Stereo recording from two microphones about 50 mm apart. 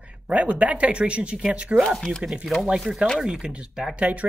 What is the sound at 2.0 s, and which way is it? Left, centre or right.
Speech, centre.